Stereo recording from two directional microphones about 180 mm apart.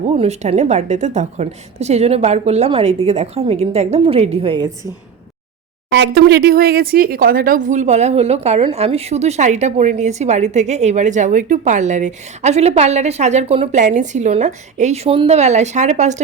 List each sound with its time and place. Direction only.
0.2 s speech: 35° right (ahead or behind)
5.9 s speech: 75° right (ahead or behind); by 16.2 s 40° right (ahead or behind)